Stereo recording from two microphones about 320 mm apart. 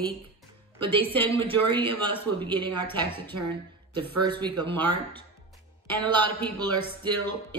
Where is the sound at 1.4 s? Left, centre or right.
Centre.